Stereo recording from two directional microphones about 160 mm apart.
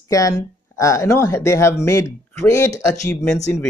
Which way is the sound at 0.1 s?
20° left (ahead or behind).